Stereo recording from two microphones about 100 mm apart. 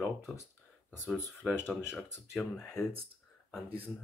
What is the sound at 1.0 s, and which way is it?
Speech, 5° right (ahead or behind).